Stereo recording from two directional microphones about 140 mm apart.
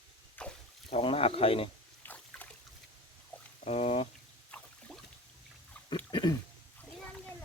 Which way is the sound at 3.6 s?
50° left (ahead or behind).